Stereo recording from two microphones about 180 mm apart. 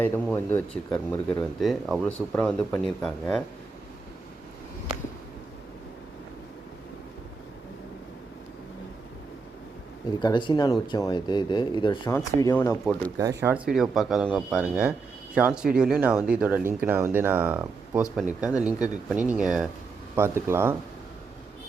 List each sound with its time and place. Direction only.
0.0 s speech: 10° left (ahead or behind)
10.2 s speech: 25° left (ahead or behind)
12.0 s speech: 15° left (ahead or behind)
13.1 s speech: 15° right (ahead or behind)
20.1 s speech: 15° right (ahead or behind)